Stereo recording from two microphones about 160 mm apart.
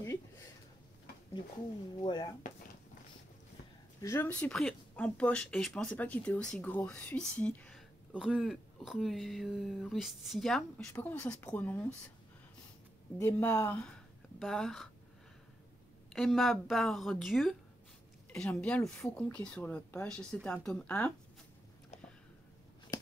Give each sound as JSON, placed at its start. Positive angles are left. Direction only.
{"t": 2.0, "sound": "speech", "side_deg": 30}
{"t": 4.0, "sound": "speech", "side_deg": 20}
{"t": 4.3, "sound": "speech", "side_deg": 5}
{"t": 8.1, "sound": "speech", "side_deg": -5}
{"t": 10.9, "sound": "speech", "side_deg": 15}
{"t": 13.2, "sound": "speech", "side_deg": 15}
{"t": 16.1, "sound": "speech", "side_deg": 0}